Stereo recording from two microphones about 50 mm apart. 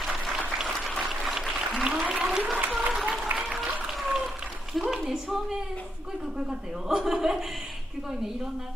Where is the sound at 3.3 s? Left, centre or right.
Right.